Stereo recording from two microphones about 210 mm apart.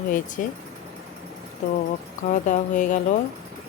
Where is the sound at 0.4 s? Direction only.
40° left (ahead or behind).